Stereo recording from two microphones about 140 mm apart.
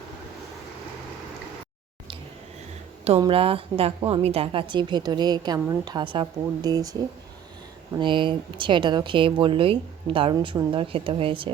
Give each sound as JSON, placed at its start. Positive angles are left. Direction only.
{"t": 3.2, "sound": "a woman's voice", "side_deg": -40}
{"t": 4.7, "sound": "a woman's voice", "side_deg": -30}
{"t": 7.9, "sound": "speech", "side_deg": -35}